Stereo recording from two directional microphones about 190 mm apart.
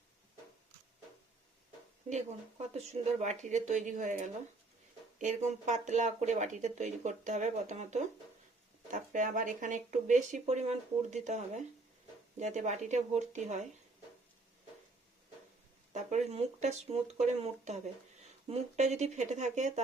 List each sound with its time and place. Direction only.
2.0 s speech: 35° right (ahead or behind)
15.9 s speech: 35° right (ahead or behind)